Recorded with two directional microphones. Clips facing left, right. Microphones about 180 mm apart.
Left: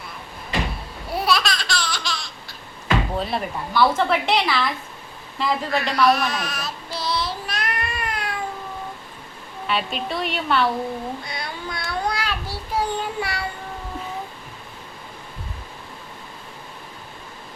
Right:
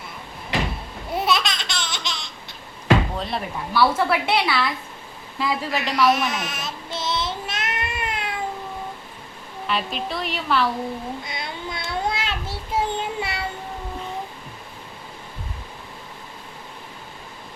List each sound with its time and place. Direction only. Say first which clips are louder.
1.1 s babbling: left 1 dB; 20° right (ahead or behind)
3.2 s a woman's voice: left 2 dB; centre (ahead or behind)
6.1 s child singing: left 1 dB; 20° right (ahead or behind)
9.6 s a woman's voice: left 1 dB; centre (ahead or behind)
11.2 s a sound: even; 20° right (ahead or behind)